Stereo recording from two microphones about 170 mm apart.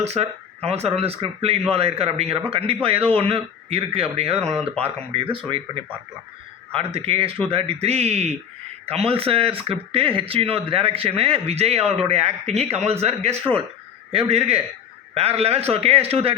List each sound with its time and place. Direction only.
0.0 s speech: 40° right (ahead or behind)